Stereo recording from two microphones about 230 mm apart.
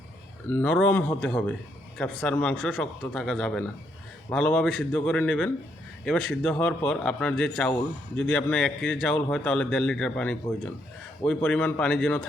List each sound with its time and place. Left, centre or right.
0.4 s speech: centre
11.4 s speech: centre